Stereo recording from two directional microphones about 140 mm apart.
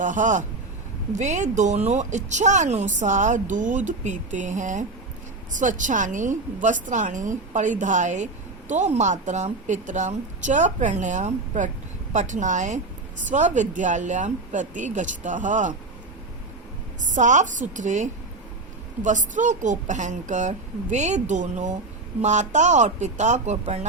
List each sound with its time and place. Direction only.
0.0 s a woman's voice: 65° right (ahead or behind)
17.0 s a woman's voice: 60° right (ahead or behind)